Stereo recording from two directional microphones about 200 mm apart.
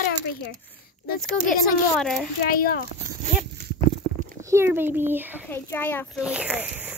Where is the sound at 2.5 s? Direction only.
45° left (ahead or behind).